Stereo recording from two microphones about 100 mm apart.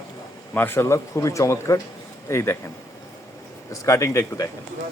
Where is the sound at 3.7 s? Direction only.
30° left (ahead or behind).